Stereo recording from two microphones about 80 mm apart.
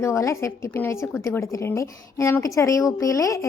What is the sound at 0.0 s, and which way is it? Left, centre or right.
A woman's voice, left.